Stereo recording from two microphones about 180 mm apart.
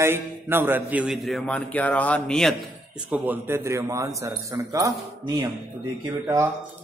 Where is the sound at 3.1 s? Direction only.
10° right (ahead or behind).